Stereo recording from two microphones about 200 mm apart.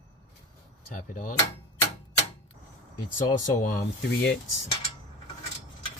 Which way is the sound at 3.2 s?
40° left (ahead or behind).